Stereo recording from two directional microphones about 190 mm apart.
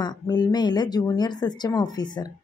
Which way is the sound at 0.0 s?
20° left (ahead or behind).